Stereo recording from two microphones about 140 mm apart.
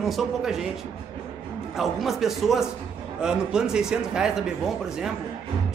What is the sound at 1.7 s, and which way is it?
Speech, centre (ahead or behind).